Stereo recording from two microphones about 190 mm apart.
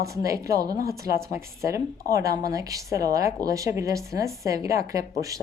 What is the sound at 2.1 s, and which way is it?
A woman's voice, 15° right (ahead or behind).